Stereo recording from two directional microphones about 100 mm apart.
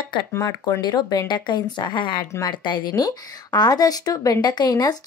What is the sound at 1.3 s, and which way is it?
Speech, 50° left (ahead or behind).